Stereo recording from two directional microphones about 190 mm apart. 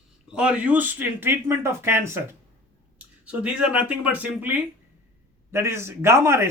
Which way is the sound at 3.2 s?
5° right (ahead or behind).